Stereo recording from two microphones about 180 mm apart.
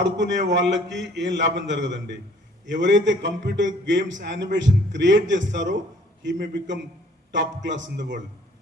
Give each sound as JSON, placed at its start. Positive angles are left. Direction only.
{"t": 0.0, "sound": "a man's voice", "side_deg": -80}